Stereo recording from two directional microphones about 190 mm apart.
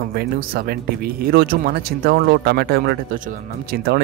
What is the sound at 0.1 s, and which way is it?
Speech, 55° right (ahead or behind).